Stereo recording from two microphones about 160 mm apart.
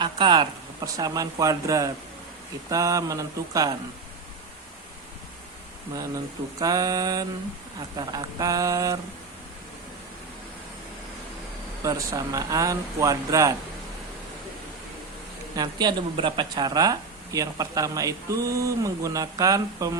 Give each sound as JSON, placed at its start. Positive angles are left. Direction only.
{"t": 0.0, "sound": "speech", "side_deg": -30}
{"t": 6.6, "sound": "speech", "side_deg": -25}
{"t": 11.8, "sound": "speech", "side_deg": -20}
{"t": 15.5, "sound": "speech", "side_deg": -25}